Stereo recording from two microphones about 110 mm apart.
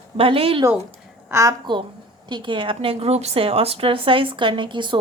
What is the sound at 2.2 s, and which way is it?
A woman's voice, 45° right (ahead or behind).